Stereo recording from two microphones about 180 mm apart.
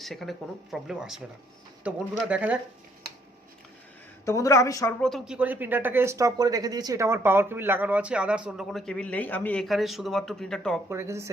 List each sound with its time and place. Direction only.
0.0 s speech: centre (ahead or behind)
4.3 s a woman's voice: 15° left (ahead or behind)
4.9 s speech: 5° left (ahead or behind)
10.8 s speech: 15° right (ahead or behind)